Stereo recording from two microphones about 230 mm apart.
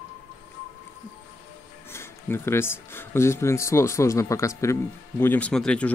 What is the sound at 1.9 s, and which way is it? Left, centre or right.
Speech, centre.